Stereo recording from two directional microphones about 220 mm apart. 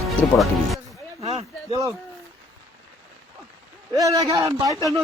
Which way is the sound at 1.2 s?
25° right (ahead or behind).